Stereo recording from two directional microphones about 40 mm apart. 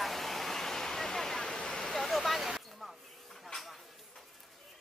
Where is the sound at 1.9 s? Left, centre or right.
Centre.